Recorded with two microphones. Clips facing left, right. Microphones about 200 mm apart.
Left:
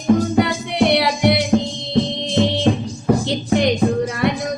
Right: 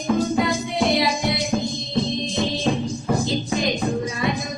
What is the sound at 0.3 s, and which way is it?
Music, 70° left (ahead or behind).